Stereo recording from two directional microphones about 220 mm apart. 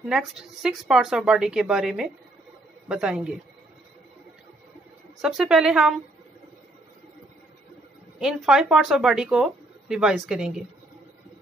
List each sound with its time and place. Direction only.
0.0 s speech: 5° right (ahead or behind)
5.2 s speech: 5° right (ahead or behind)
8.2 s speech: centre (ahead or behind)